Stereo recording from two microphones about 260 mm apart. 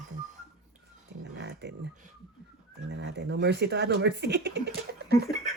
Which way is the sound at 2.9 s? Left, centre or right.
Right.